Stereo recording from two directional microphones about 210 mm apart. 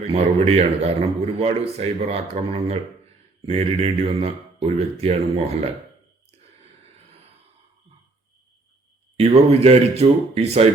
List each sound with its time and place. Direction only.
0.1 s a man's voice: 30° right (ahead or behind)
9.1 s a man's voice: 30° right (ahead or behind)